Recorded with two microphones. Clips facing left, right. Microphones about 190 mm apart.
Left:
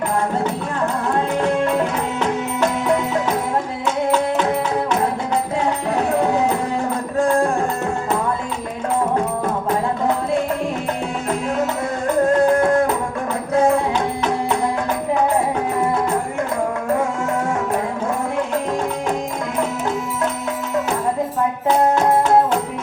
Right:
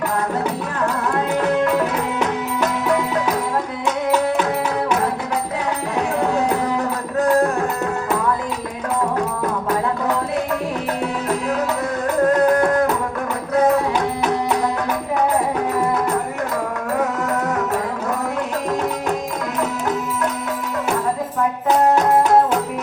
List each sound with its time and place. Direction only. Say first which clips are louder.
12.4 s music: left 1 dB; 25° left (ahead or behind)